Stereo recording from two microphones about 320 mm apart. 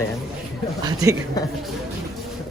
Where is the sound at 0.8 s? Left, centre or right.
Centre.